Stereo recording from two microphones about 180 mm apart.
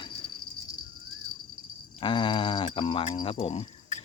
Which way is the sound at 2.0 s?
25° left (ahead or behind).